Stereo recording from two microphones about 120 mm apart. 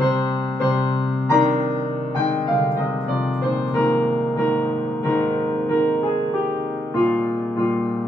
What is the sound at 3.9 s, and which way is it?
Music, 15° left (ahead or behind).